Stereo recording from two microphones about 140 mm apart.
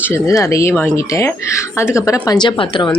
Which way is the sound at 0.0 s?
20° left (ahead or behind).